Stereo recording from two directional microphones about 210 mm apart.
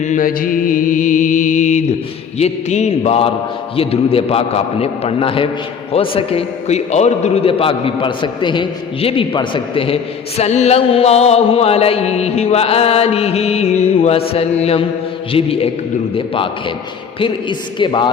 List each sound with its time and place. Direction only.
0.0 s music: 40° left (ahead or behind)
3.8 s a man's voice: 25° left (ahead or behind)